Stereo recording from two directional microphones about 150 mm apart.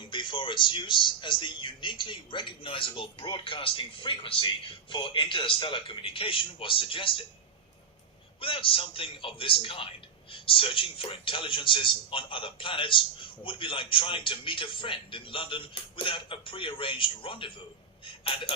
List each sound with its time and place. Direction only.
0.0 s a man's voice: 35° left (ahead or behind)
8.4 s a man's voice: 35° left (ahead or behind)